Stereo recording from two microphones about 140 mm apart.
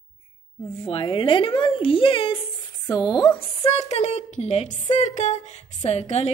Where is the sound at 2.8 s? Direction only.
25° left (ahead or behind).